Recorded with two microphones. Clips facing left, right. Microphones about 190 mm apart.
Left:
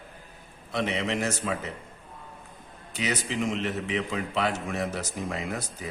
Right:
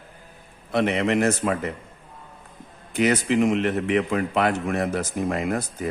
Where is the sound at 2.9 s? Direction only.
55° right (ahead or behind).